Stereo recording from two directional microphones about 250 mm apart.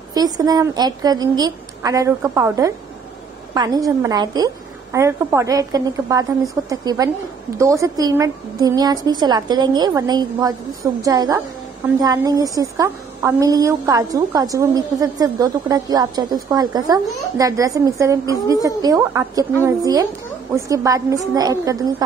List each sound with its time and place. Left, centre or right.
0.1 s a woman's voice: centre